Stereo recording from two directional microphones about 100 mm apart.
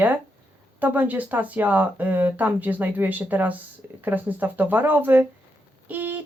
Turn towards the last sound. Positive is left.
turn(degrees=-20)  # may be behind; listen again after turning